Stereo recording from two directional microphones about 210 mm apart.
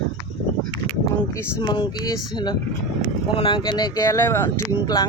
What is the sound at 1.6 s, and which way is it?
Speech, 20° left (ahead or behind).